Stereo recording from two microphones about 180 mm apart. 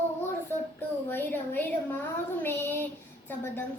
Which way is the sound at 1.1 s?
10° left (ahead or behind).